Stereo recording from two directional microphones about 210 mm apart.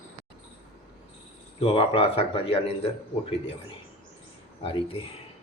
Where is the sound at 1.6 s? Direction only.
25° left (ahead or behind).